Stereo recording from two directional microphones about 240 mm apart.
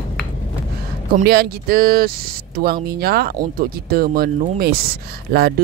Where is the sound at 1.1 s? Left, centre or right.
Right.